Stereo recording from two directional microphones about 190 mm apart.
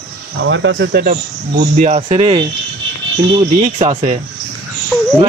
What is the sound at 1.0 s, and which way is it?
Speech, 40° right (ahead or behind).